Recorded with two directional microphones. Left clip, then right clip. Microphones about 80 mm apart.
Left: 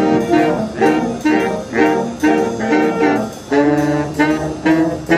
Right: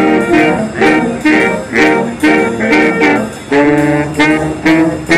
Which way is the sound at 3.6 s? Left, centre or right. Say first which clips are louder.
Right 5 dB; centre.